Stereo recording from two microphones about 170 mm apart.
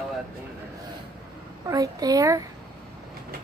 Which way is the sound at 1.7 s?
20° right (ahead or behind).